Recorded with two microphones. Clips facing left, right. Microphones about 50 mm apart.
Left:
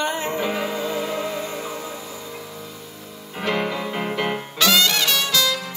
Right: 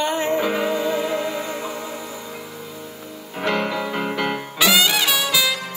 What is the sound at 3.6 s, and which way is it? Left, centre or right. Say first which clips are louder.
Music: right 2 dB; centre.